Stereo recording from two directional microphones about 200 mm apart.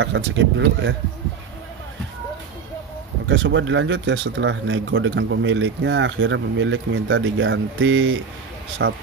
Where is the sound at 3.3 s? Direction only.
70° right (ahead or behind).